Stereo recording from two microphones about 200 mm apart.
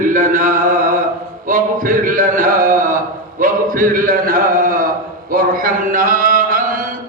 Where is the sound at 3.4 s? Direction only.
40° right (ahead or behind).